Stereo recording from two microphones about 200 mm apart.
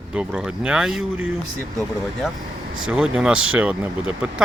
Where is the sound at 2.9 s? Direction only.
5° right (ahead or behind).